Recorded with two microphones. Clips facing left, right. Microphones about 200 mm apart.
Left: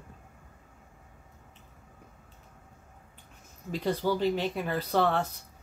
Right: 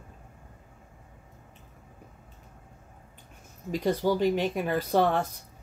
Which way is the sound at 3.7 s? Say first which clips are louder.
Right 3 dB; 15° right (ahead or behind).